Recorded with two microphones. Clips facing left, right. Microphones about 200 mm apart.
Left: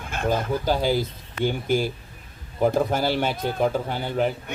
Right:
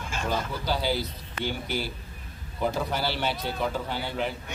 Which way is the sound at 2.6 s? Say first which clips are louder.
Left 7 dB; 50° left (ahead or behind).